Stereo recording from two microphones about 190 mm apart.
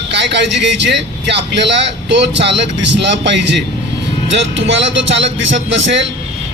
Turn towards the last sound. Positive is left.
turn(degrees=-70)  # may be behind; listen again after turning